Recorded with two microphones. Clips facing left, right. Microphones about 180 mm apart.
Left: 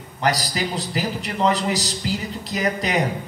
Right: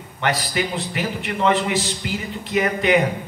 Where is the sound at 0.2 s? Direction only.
40° left (ahead or behind).